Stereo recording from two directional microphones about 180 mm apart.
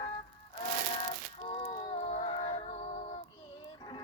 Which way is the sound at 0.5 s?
30° left (ahead or behind).